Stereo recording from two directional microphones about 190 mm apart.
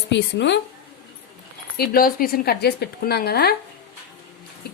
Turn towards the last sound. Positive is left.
turn(degrees=60)  # may be behind; listen again after turning